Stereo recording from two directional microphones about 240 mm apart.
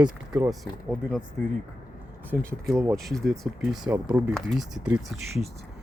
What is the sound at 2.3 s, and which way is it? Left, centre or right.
Speech, centre.